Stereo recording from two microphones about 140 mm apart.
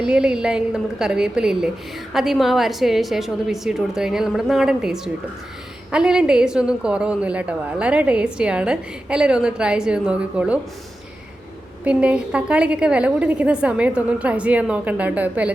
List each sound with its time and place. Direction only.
0.0 s a woman's voice: 5° right (ahead or behind)
11.9 s a woman's voice: 10° right (ahead or behind)